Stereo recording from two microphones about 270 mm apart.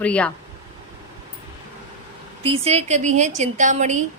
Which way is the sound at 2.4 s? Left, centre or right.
Right.